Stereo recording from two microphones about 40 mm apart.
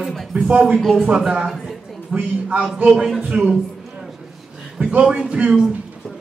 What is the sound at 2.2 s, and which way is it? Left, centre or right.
Speech, right.